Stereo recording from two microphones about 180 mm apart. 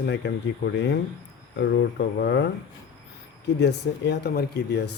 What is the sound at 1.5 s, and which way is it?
Speech, 70° left (ahead or behind).